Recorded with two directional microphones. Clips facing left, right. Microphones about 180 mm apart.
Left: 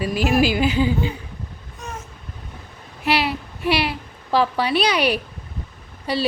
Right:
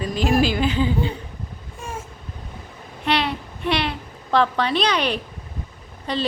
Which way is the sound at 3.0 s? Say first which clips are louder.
Left 1 dB; 5° left (ahead or behind).